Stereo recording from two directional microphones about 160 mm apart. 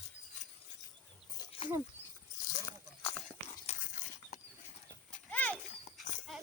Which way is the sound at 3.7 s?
50° left (ahead or behind).